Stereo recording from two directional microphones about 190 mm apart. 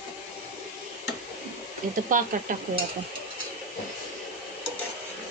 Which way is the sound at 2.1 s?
45° right (ahead or behind).